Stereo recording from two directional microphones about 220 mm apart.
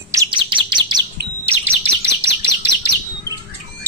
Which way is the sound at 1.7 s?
90° right.